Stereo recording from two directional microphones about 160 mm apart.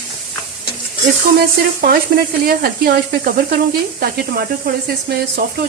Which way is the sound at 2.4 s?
70° right (ahead or behind).